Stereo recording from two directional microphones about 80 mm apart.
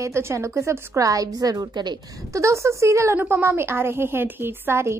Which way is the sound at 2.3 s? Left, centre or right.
Right.